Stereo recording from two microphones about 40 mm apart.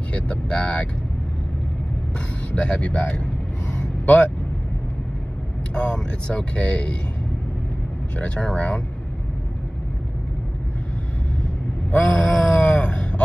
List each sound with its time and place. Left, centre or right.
0.1 s speech: left
2.1 s speech: left
5.8 s speech: left
8.2 s speech: left
11.9 s a sound: left